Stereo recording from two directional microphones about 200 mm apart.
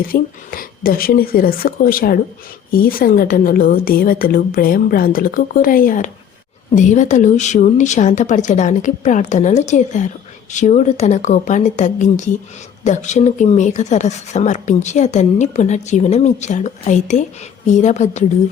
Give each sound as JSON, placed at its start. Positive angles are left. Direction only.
{"t": 0.1, "sound": "a woman's voice", "side_deg": 45}